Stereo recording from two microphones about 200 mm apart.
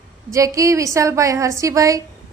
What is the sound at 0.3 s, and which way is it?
A woman's voice, 15° right (ahead or behind).